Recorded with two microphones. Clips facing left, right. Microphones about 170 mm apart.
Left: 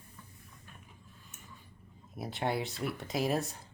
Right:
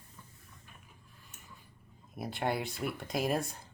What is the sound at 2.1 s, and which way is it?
Speech, centre (ahead or behind).